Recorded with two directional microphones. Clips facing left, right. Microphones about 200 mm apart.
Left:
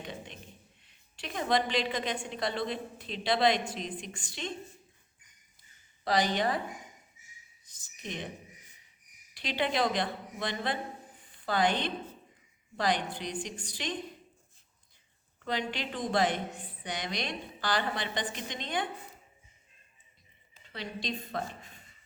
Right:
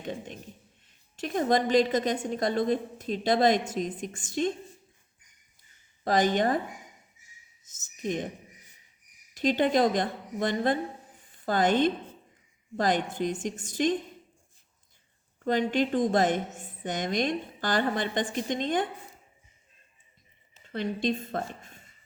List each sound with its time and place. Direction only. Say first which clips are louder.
0.0 s a sound: right 6 dB; 45° right (ahead or behind)
0.9 s a woman's voice: right 9 dB; 45° right (ahead or behind)
6.1 s a woman's voice: right 4 dB; 50° right (ahead or behind)
8.0 s a woman's voice: right 9 dB; 45° right (ahead or behind)
9.3 s a woman's voice: right 8 dB; 45° right (ahead or behind)
15.4 s a woman's voice: right 9 dB; 45° right (ahead or behind)
20.7 s a woman's voice: right 9 dB; 50° right (ahead or behind)